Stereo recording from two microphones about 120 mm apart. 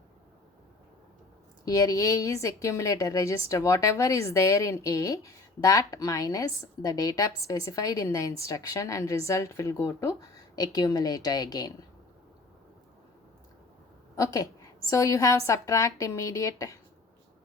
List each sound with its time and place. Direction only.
1.6 s a woman's voice: 30° left (ahead or behind)
14.2 s a woman's voice: 30° left (ahead or behind)